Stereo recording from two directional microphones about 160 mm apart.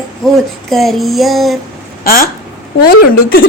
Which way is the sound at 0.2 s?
Centre (ahead or behind).